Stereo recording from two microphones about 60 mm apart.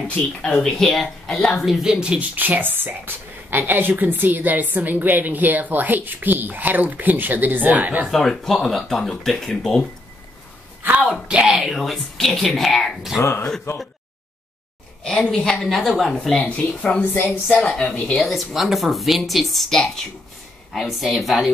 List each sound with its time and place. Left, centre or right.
0.5 s a woman's voice: centre
2.0 s speech: centre
2.3 s a woman's voice: right
8.1 s speech: centre
10.8 s a sound: right
11.2 s speech: centre
11.8 s speech: centre
13.2 s speech: left
15.1 s a woman's voice: centre
16.4 s speech: left
17.0 s a woman's voice: left
18.1 s speech: centre